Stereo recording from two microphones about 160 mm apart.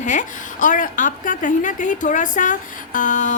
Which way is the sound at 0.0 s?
50° left (ahead or behind).